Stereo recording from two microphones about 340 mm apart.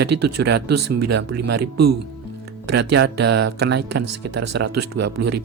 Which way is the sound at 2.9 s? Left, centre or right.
Right.